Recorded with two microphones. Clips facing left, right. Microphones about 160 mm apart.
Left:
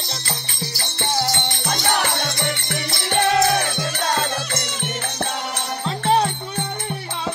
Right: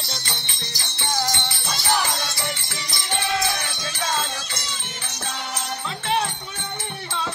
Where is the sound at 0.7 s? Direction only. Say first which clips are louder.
Left 7 dB; 55° left (ahead or behind).